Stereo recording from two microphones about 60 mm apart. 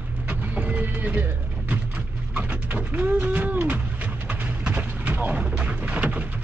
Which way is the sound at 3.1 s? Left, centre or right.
Right.